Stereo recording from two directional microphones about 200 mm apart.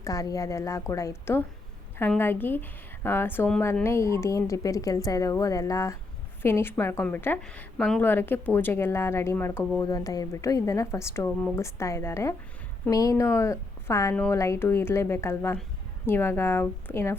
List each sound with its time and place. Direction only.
0.0 s a woman's voice: 15° left (ahead or behind)